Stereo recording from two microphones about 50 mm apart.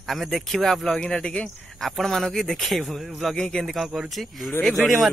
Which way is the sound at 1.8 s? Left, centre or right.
Centre.